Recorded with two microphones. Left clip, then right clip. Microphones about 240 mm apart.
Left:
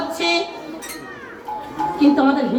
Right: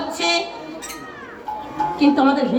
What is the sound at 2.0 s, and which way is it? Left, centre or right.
Speech, right.